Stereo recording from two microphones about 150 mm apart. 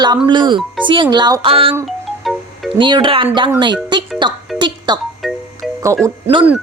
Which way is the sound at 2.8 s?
30° right (ahead or behind).